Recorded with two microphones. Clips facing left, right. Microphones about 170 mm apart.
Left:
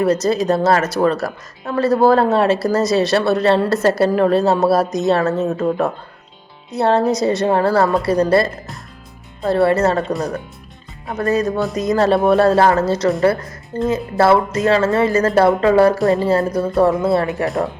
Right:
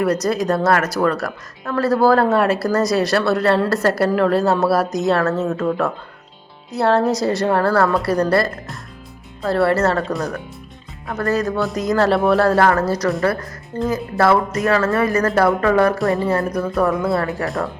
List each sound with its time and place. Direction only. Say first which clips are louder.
0.0 s a woman's voice: left 2 dB; 25° left (ahead or behind)
10.0 s speech: left 2 dB; centre (ahead or behind)
11.0 s a woman's voice: left 2 dB; 20° left (ahead or behind)
14.2 s a woman's voice: left 2 dB; 25° left (ahead or behind)